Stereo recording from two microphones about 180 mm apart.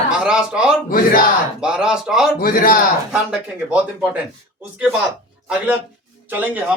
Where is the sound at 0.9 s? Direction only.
50° left (ahead or behind).